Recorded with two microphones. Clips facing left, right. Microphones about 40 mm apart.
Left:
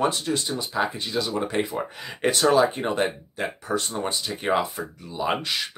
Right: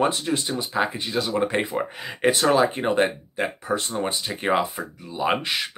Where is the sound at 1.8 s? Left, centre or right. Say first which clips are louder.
Right 2 dB; centre.